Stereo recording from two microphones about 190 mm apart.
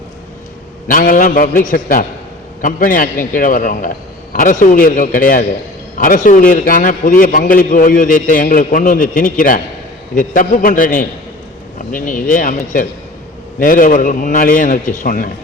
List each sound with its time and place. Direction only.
0.9 s a man's voice: 45° left (ahead or behind)